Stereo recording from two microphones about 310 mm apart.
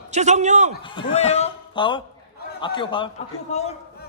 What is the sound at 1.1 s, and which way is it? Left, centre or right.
A man's voice, left.